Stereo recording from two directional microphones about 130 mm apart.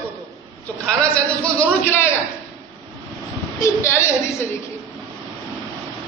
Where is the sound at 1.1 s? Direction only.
10° left (ahead or behind).